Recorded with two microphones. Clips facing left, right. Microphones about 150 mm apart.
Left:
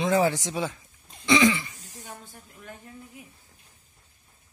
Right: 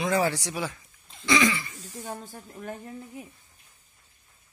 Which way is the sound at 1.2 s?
25° left (ahead or behind).